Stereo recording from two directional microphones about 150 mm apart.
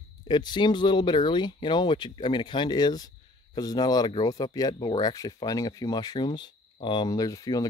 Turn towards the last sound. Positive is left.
turn(degrees=25)  # may be behind; listen again after turning